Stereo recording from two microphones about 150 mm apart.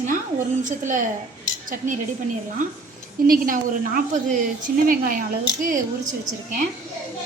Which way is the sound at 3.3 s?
70° right (ahead or behind).